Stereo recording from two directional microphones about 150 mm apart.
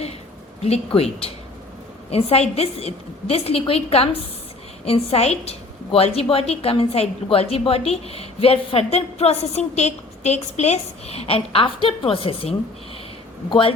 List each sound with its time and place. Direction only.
0.6 s a woman's voice: 40° left (ahead or behind)